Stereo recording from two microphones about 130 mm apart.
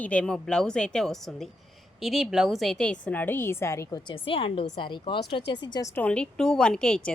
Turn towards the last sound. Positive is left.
turn(degrees=5)  # may be behind; listen again after turning